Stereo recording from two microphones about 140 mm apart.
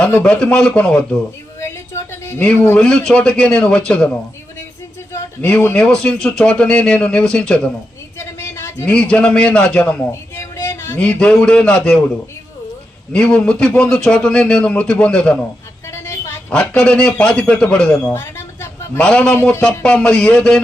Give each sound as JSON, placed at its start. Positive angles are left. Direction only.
{"t": 0.0, "sound": "speech", "side_deg": 10}
{"t": 1.5, "sound": "a sound", "side_deg": 20}
{"t": 2.5, "sound": "speech", "side_deg": 10}
{"t": 5.5, "sound": "speech", "side_deg": 10}
{"t": 8.2, "sound": "a man's voice", "side_deg": 20}
{"t": 10.1, "sound": "a man's voice", "side_deg": 20}
{"t": 13.1, "sound": "speech", "side_deg": 5}
{"t": 15.9, "sound": "a sound", "side_deg": 20}
{"t": 16.5, "sound": "speech", "side_deg": 5}
{"t": 18.1, "sound": "a sound", "side_deg": 20}
{"t": 18.9, "sound": "speech", "side_deg": 5}
{"t": 19.4, "sound": "speech", "side_deg": 20}
{"t": 19.6, "sound": "speech", "side_deg": 5}